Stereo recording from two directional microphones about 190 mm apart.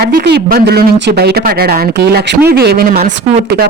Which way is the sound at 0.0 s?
55° right (ahead or behind).